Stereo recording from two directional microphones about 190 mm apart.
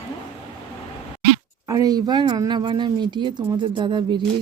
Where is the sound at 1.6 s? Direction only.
20° right (ahead or behind).